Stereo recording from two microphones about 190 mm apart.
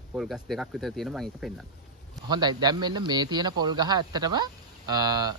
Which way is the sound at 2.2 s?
20° right (ahead or behind).